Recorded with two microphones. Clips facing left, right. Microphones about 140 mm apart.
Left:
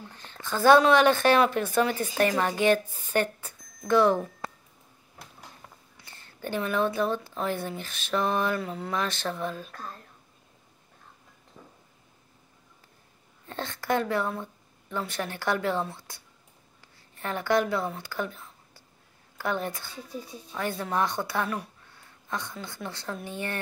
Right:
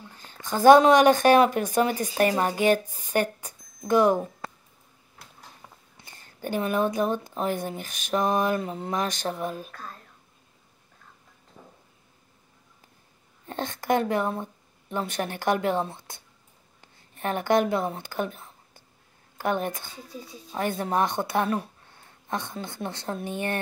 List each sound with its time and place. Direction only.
0.1 s a woman's voice: 10° right (ahead or behind)
5.9 s speech: 15° right (ahead or behind)
7.8 s mantra: 15° right (ahead or behind)
13.5 s a woman's voice: 15° right (ahead or behind)
16.8 s a sound: 20° right (ahead or behind)
19.4 s a woman's voice: 20° right (ahead or behind)
20.8 s speech: 20° right (ahead or behind)